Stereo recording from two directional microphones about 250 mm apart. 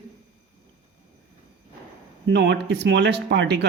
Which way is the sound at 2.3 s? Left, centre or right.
Right.